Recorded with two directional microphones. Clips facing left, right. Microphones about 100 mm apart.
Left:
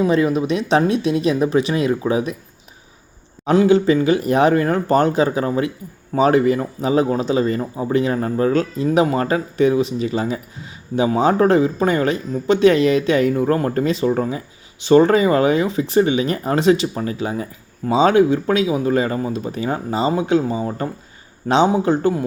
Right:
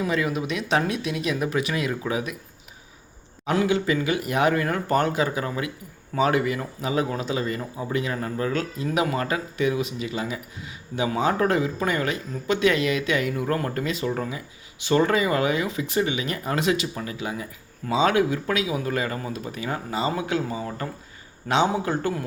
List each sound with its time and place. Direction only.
0.0 s a man's voice: 30° left (ahead or behind)
3.4 s a man's voice: 30° left (ahead or behind)